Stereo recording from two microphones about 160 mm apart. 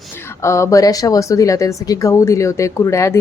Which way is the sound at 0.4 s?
15° left (ahead or behind).